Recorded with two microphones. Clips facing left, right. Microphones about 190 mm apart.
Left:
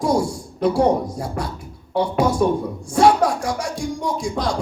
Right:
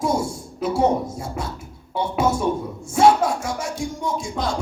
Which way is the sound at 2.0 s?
25° right (ahead or behind).